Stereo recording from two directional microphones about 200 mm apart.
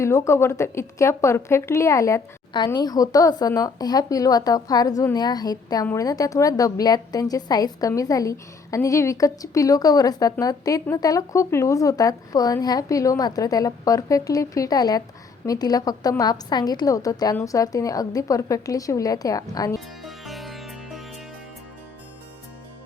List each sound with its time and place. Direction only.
0.0 s speech: 15° left (ahead or behind)
20.1 s music: centre (ahead or behind)